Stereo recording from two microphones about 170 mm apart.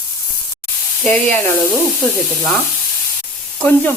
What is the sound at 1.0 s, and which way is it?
Frying, 5° left (ahead or behind).